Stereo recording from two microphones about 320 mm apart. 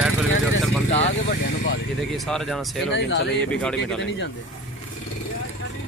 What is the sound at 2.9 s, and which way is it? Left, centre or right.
Speech, left.